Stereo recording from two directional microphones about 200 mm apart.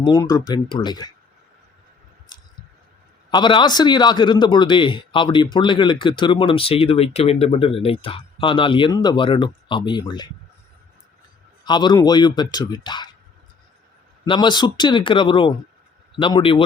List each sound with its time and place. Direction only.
0.0 s speech: 20° left (ahead or behind)
2.3 s squish: 20° left (ahead or behind)
3.2 s speech: 20° left (ahead or behind)
11.6 s a man's voice: 20° left (ahead or behind)
14.3 s speech: 20° left (ahead or behind)